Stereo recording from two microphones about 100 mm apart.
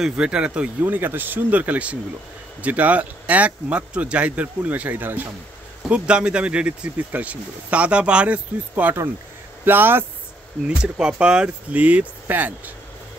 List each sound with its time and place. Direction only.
0.0 s speech: 10° right (ahead or behind)
10.7 s speech: 10° right (ahead or behind)